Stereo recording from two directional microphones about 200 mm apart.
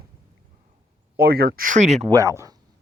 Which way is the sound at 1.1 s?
50° right (ahead or behind).